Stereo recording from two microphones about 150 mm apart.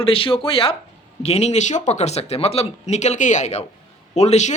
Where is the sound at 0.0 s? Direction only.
35° left (ahead or behind).